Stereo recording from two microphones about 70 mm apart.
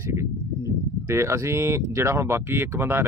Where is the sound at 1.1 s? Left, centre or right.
Right.